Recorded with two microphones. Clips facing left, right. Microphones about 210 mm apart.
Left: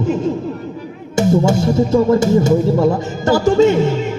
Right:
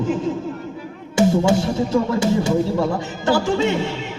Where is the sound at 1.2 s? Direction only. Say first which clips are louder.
Left 2 dB; 45° left (ahead or behind).